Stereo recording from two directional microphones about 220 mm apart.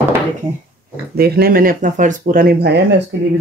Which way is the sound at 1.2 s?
45° right (ahead or behind).